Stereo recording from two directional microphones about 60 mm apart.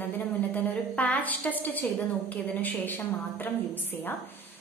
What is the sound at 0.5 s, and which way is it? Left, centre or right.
A woman's voice, left.